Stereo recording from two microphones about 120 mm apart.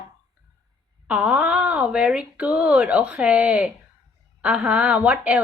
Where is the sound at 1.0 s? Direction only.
10° right (ahead or behind).